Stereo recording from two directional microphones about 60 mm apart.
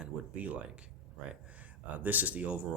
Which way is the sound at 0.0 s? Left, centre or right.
Right.